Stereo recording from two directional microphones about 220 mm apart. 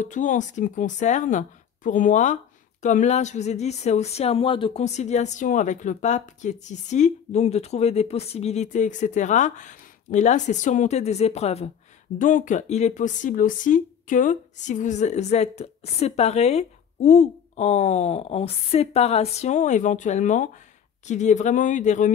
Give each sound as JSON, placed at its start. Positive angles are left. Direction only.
{"t": 0.0, "sound": "speech", "side_deg": 35}